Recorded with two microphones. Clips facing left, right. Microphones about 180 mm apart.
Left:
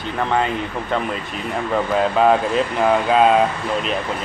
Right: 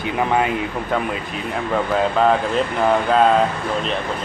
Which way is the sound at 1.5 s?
5° left (ahead or behind).